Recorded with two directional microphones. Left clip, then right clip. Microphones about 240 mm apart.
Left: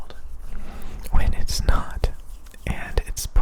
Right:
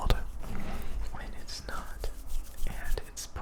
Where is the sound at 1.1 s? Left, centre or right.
Left.